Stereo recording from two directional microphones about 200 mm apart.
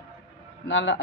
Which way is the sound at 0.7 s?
65° left (ahead or behind).